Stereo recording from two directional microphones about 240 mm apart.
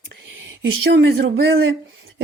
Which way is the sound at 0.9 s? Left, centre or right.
Right.